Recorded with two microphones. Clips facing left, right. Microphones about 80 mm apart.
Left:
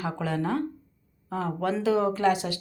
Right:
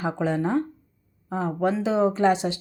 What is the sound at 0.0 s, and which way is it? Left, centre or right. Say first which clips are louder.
Speech: right 4 dB; right.